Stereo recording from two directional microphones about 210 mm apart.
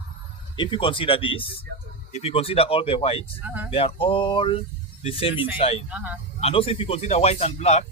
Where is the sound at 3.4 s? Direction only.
5° right (ahead or behind).